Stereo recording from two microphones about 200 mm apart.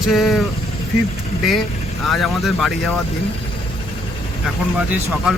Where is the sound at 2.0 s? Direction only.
Centre (ahead or behind).